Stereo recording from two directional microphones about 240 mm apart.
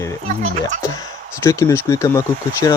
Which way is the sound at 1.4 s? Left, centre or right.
Centre.